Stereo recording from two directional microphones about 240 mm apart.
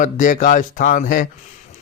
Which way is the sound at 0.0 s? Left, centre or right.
Left.